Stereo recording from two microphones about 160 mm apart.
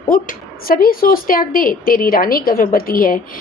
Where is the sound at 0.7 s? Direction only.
65° left (ahead or behind).